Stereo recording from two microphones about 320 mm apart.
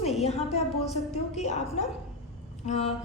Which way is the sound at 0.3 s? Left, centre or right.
Centre.